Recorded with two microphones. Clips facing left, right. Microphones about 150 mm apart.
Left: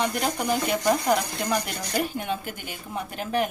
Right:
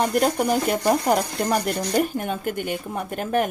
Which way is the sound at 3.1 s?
50° right (ahead or behind).